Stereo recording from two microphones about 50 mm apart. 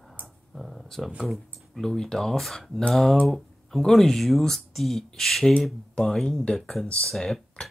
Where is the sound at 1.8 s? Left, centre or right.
Centre.